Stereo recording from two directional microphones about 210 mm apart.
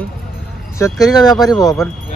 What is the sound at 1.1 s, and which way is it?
Speech, 20° left (ahead or behind).